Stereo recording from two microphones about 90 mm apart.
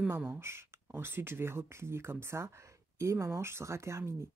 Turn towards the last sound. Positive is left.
turn(degrees=-30)  # may be behind; listen again after turning